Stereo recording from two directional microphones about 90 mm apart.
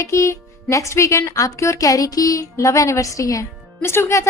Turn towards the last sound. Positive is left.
turn(degrees=30)  # may be behind; listen again after turning